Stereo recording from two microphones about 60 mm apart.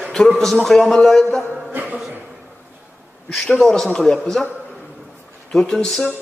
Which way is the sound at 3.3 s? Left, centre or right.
Centre.